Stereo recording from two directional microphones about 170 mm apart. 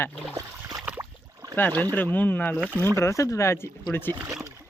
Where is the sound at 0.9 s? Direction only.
20° right (ahead or behind).